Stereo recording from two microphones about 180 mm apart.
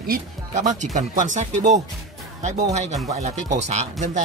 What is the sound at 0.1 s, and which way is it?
Speech, 45° right (ahead or behind).